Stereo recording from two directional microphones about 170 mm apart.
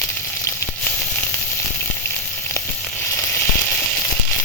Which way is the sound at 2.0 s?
10° left (ahead or behind).